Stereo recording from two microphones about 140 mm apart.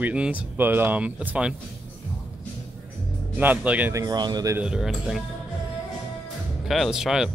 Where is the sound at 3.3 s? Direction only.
10° right (ahead or behind).